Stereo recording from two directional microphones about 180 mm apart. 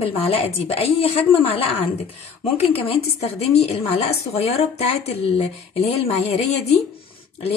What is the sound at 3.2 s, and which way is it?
A woman's voice, 35° left (ahead or behind).